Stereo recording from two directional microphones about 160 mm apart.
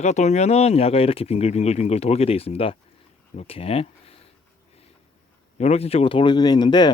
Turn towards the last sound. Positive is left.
turn(degrees=25)  # may be behind; listen again after turning